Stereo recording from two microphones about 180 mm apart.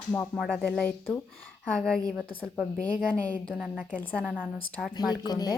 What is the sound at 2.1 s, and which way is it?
A woman's voice, centre (ahead or behind).